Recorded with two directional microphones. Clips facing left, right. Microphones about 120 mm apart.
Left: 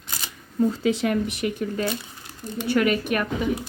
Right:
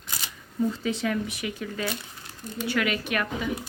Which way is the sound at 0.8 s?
75° left (ahead or behind).